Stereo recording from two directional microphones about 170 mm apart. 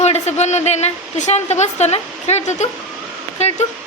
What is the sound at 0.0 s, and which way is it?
A woman's voice, 40° left (ahead or behind).